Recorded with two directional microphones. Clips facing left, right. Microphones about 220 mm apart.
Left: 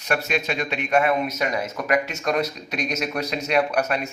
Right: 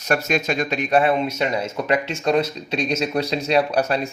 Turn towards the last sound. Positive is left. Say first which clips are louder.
# right 2 dB
turn(degrees=-30)  # may be behind; listen again after turning